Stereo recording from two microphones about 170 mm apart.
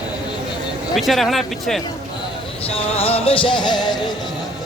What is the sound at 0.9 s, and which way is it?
Speech, centre (ahead or behind).